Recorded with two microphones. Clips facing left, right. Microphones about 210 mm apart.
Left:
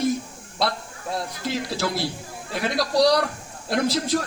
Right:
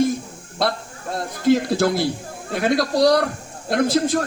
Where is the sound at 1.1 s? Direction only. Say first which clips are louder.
Right 10 dB; 50° right (ahead or behind).